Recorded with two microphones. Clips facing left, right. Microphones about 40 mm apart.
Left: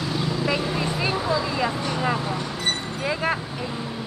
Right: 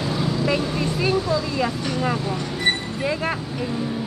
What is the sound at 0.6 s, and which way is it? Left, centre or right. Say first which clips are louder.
Vehicle: right 2 dB; centre.